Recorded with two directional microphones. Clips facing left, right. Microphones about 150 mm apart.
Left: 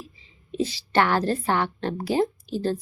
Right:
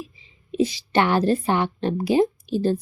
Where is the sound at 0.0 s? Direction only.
15° right (ahead or behind).